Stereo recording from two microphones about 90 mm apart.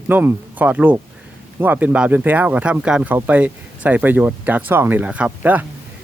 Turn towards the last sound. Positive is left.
turn(degrees=-20)  # may be behind; listen again after turning